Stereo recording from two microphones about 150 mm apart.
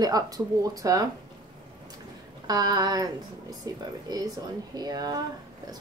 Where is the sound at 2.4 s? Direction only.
25° right (ahead or behind).